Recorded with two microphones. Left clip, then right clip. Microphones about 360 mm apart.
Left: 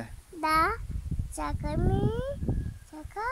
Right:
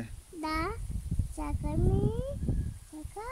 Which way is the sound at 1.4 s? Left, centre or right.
Left.